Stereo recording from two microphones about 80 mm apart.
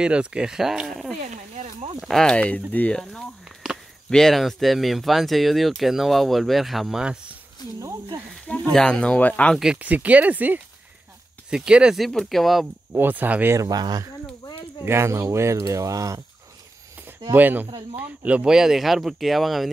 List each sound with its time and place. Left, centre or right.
0.0 s speech: centre
3.0 s speech: centre
8.7 s speech: centre
9.8 s speech: centre
12.0 s speech: centre
12.9 s speech: right
13.6 s speech: right
14.9 s speech: right
17.3 s speech: right; by 19.7 s centre